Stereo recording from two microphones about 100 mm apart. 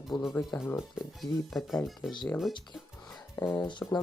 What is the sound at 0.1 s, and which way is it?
Speech, 50° left (ahead or behind).